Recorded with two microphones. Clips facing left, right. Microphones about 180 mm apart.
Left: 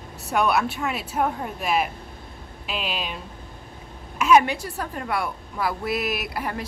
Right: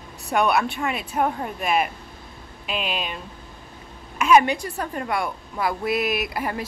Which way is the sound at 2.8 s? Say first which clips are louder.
Right 2 dB; 55° right (ahead or behind).